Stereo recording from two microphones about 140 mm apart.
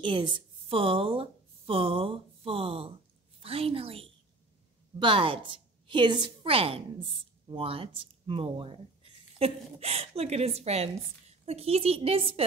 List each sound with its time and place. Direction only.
0.0 s a woman's voice: 35° right (ahead or behind)